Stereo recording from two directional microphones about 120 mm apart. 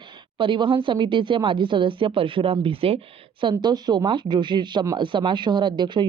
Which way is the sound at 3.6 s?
35° right (ahead or behind).